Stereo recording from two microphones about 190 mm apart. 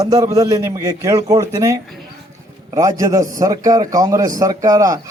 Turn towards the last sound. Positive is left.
turn(degrees=-20)  # may be behind; listen again after turning